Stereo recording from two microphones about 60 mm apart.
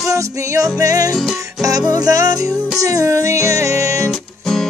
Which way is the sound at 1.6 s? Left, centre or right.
Right.